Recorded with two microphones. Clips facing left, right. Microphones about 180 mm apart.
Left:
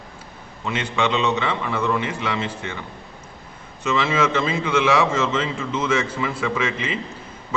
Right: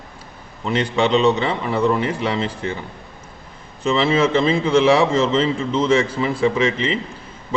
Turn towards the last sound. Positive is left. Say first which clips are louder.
# right 6 dB
turn(degrees=-30)  # may be behind; listen again after turning